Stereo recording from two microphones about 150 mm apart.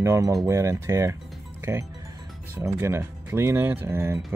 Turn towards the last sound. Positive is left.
turn(degrees=-15)  # may be behind; listen again after turning